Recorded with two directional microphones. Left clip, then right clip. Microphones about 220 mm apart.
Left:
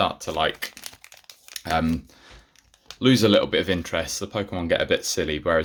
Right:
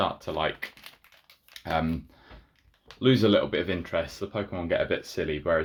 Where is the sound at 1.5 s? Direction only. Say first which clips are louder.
Left 4 dB; 35° left (ahead or behind).